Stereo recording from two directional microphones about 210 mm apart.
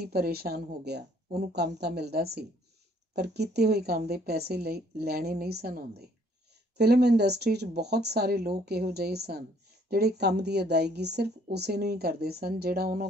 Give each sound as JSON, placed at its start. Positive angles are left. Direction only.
{"t": 0.0, "sound": "speech", "side_deg": -50}